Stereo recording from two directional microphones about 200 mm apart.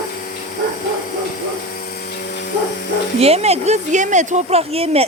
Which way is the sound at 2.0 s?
55° left (ahead or behind).